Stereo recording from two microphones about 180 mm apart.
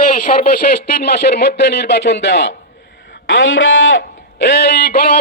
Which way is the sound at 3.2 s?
85° left.